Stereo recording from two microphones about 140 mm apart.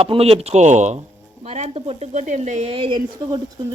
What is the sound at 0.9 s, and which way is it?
Speech, 45° right (ahead or behind).